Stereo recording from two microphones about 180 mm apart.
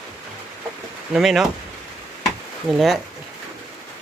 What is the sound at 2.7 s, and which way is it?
Speech, centre (ahead or behind).